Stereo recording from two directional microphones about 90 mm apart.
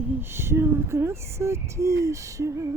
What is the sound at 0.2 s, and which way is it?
Speech, 25° right (ahead or behind).